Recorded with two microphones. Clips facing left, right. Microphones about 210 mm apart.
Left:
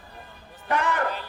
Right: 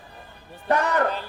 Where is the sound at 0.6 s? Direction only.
40° right (ahead or behind).